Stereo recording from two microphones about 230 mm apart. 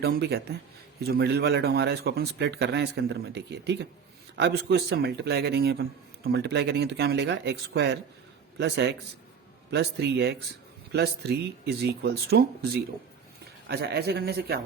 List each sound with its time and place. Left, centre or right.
0.0 s speech: right